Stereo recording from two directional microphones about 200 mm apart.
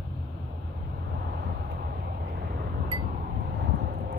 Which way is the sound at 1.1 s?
60° right (ahead or behind).